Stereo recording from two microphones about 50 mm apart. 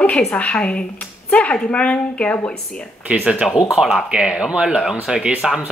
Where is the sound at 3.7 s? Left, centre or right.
Centre.